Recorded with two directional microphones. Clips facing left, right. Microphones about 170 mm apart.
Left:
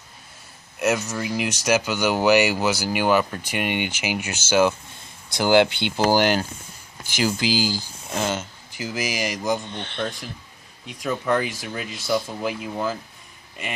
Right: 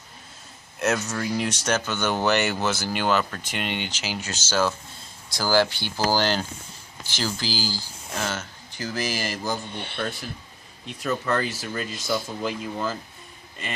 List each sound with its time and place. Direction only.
0.8 s speech: 10° left (ahead or behind)
8.8 s speech: 5° left (ahead or behind)
10.8 s speech: 10° left (ahead or behind)